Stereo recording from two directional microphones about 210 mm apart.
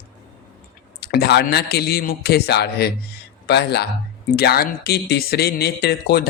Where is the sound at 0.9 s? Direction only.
50° left (ahead or behind).